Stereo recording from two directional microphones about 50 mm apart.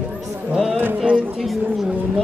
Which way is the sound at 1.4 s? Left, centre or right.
Centre.